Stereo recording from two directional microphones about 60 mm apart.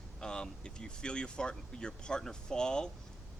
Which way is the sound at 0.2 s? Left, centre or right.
Centre.